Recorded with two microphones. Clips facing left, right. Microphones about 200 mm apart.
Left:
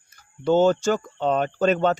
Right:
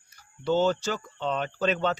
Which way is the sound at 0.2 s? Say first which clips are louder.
Left 6 dB; 50° left (ahead or behind).